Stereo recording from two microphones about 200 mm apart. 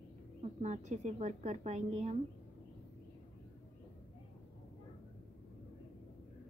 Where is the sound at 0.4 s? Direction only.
35° right (ahead or behind).